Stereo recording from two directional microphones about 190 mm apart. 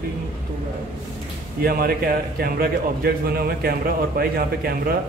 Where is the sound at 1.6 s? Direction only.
50° right (ahead or behind).